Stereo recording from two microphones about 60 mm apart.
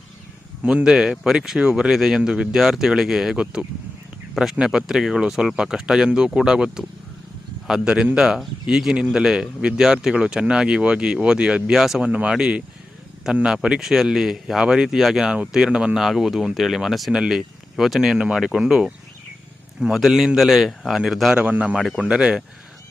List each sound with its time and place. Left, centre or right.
0.6 s speech: centre
12.0 s speech: centre
16.0 s a man's voice: centre
19.9 s a man's voice: centre
21.3 s speech: centre